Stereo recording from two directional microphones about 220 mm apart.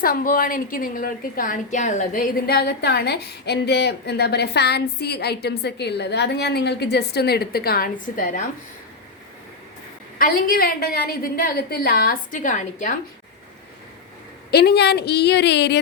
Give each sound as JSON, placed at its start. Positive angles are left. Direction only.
{"t": 0.0, "sound": "a woman's voice", "side_deg": 40}
{"t": 10.2, "sound": "a woman's voice", "side_deg": 40}
{"t": 14.5, "sound": "a woman's voice", "side_deg": 45}